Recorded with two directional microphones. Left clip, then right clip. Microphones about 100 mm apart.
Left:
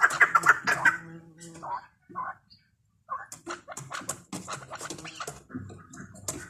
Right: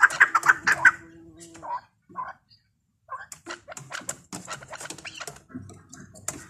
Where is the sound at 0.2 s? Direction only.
30° right (ahead or behind).